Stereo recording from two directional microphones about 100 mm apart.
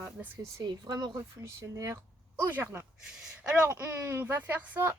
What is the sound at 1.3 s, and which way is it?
Speech, 25° right (ahead or behind).